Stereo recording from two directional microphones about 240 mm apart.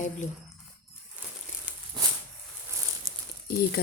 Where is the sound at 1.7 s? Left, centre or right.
Centre.